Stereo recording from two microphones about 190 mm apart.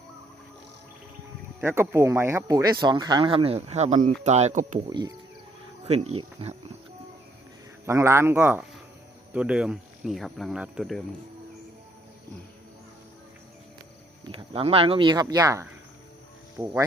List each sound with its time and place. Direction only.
1.6 s speech: 15° right (ahead or behind); by 4.8 s 40° right (ahead or behind)
4.9 s speech: 20° right (ahead or behind)
5.9 s speech: 35° right (ahead or behind)
7.9 s speech: 15° right (ahead or behind)
14.3 s speech: 30° right (ahead or behind); by 16.7 s 10° right (ahead or behind)